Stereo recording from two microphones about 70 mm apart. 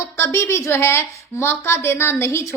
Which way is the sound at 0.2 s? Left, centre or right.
Left.